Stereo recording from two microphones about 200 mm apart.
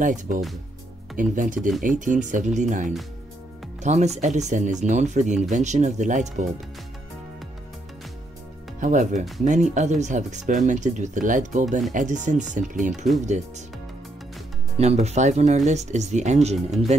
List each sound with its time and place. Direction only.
0.0 s speech: 40° right (ahead or behind)
8.7 s speech: 35° right (ahead or behind)
14.8 s speech: 35° right (ahead or behind)